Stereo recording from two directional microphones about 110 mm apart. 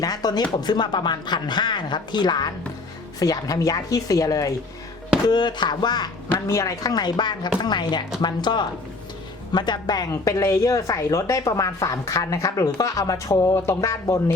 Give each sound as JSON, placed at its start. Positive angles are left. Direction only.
{"t": 0.0, "sound": "speech", "side_deg": 35}
{"t": 5.3, "sound": "speech", "side_deg": 40}
{"t": 6.5, "sound": "speech", "side_deg": 30}